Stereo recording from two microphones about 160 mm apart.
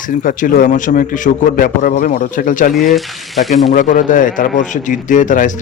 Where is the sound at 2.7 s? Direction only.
Centre (ahead or behind).